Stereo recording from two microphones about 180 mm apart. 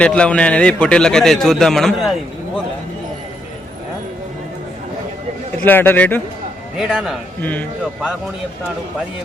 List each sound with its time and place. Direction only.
0.0 s a man's voice: 5° left (ahead or behind)
5.6 s speech: 10° left (ahead or behind)
6.7 s a man's voice: centre (ahead or behind)